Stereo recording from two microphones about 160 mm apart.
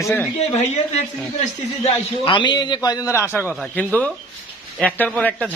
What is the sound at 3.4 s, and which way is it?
Speech, 10° right (ahead or behind).